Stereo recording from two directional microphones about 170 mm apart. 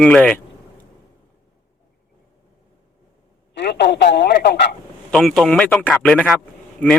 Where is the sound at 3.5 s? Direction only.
90° left; by 4.6 s 75° left (ahead or behind).